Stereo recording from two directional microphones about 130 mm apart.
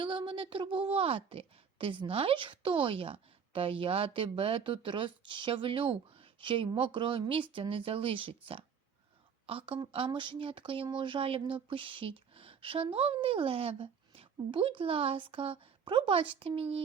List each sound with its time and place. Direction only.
0.0 s a woman's voice: 40° right (ahead or behind)